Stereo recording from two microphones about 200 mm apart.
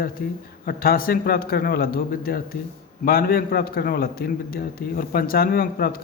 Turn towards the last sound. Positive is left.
turn(degrees=50)  # may be behind; listen again after turning